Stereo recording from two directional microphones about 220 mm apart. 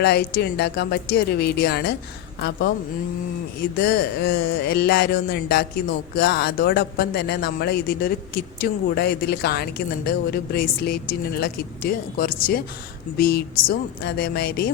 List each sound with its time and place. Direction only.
0.0 s speech: 45° left (ahead or behind)
3.8 s speech: 45° left (ahead or behind)